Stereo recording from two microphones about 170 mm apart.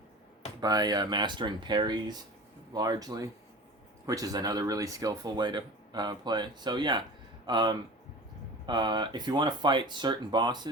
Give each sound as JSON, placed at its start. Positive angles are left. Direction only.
{"t": 0.6, "sound": "speech", "side_deg": -25}